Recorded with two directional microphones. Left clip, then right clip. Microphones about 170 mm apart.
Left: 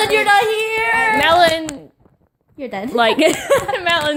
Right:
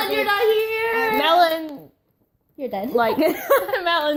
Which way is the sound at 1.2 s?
15° left (ahead or behind).